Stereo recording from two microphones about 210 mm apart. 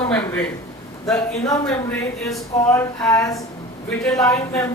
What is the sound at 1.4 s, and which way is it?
Speech, 15° left (ahead or behind).